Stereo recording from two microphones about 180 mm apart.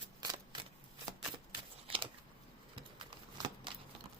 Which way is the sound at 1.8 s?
30° right (ahead or behind).